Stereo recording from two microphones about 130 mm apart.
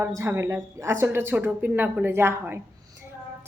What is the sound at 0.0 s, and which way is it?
A woman's voice, 20° right (ahead or behind).